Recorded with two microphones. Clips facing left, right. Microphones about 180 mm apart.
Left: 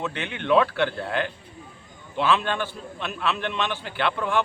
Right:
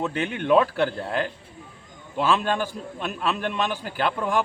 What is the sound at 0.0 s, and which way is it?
A man's voice, 40° right (ahead or behind).